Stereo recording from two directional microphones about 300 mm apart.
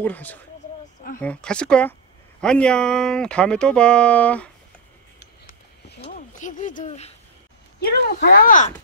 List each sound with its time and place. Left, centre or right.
0.0 s speech: centre
6.0 s speech: left